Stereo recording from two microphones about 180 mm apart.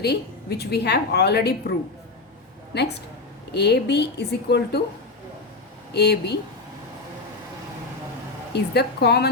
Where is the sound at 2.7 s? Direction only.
70° left (ahead or behind).